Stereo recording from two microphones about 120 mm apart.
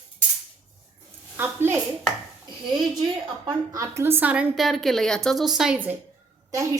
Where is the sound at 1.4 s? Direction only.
20° right (ahead or behind).